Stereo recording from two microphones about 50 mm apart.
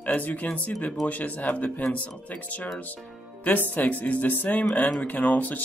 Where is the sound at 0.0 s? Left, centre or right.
Left.